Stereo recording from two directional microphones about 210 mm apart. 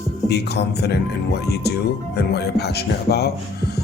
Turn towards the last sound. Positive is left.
turn(degrees=50)  # may be behind; listen again after turning